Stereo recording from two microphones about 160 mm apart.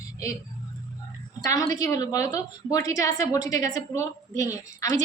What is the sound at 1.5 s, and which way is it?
A woman's voice, 20° left (ahead or behind).